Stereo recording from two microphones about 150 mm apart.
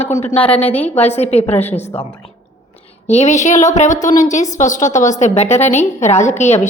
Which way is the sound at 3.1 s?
50° left (ahead or behind).